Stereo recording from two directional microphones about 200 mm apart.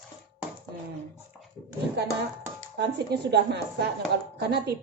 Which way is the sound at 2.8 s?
55° right (ahead or behind).